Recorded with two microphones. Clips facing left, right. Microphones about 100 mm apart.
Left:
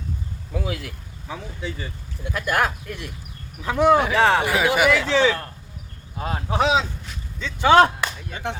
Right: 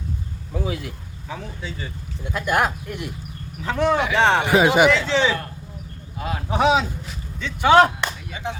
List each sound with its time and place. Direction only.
0.5 s speech: 25° right (ahead or behind)
3.6 s speech: 15° left (ahead or behind)
4.1 s speech: 20° right (ahead or behind)
6.1 s speech: 35° left (ahead or behind)
6.5 s speech: 15° right (ahead or behind)
7.6 s speech: 25° left (ahead or behind)
8.3 s speech: 55° left (ahead or behind)